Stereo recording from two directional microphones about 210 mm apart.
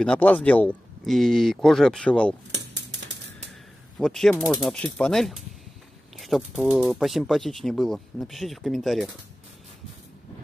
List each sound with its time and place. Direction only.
0.0 s speech: 5° left (ahead or behind)
2.5 s a sound: 55° right (ahead or behind)
4.0 s speech: centre (ahead or behind)